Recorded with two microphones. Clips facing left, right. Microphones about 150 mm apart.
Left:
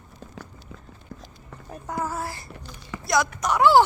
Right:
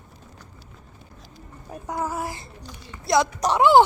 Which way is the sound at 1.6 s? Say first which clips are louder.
Right 1 dB; 15° right (ahead or behind).